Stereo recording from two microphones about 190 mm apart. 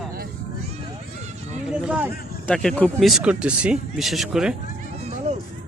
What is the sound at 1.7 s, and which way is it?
Run, 5° right (ahead or behind).